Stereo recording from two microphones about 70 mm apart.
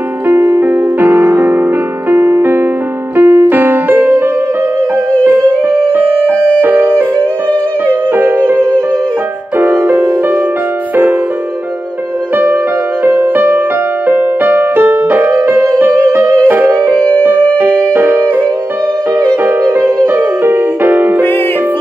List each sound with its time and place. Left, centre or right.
0.3 s music: right
5.2 s music: right
9.7 s music: right
13.0 s music: right
19.8 s music: right
20.8 s music: right